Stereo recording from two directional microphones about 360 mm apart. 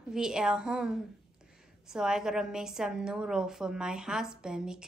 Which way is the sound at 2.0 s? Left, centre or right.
Centre.